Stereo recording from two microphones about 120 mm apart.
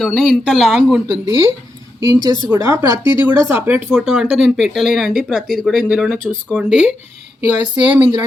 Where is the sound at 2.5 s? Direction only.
20° right (ahead or behind).